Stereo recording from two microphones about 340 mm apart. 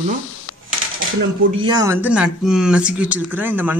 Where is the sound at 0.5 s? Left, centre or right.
Left.